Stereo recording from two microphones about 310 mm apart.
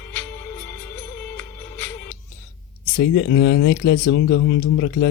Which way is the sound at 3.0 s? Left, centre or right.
Left.